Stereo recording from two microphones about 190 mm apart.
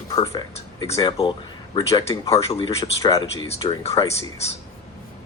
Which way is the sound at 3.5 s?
35° left (ahead or behind).